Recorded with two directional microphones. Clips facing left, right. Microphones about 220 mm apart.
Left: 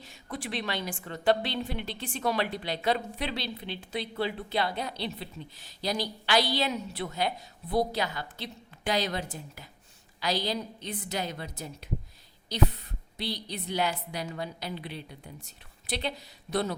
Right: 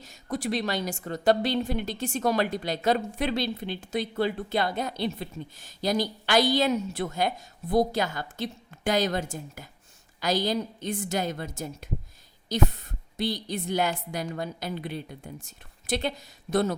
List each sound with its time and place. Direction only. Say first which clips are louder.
0.0 s speech: right 7 dB; 40° right (ahead or behind)